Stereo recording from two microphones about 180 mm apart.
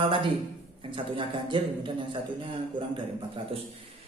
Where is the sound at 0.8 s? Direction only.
30° right (ahead or behind).